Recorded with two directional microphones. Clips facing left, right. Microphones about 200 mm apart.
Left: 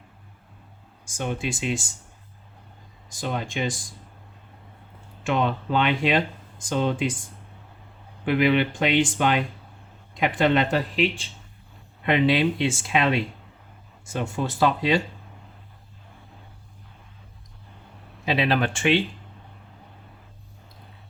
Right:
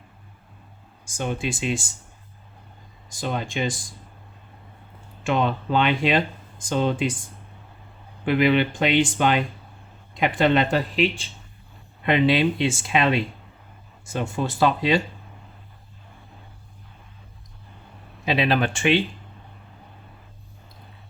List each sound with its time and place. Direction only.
1.1 s speech: 30° right (ahead or behind)
3.2 s speech: 30° right (ahead or behind)
5.2 s speech: 30° right (ahead or behind)
8.2 s speech: 30° right (ahead or behind)
12.0 s speech: 30° right (ahead or behind)
18.3 s speech: 20° right (ahead or behind)